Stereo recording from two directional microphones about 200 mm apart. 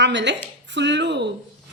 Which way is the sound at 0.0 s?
60° right (ahead or behind).